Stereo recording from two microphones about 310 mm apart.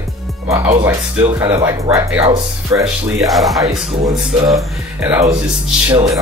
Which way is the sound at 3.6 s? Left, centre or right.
Centre.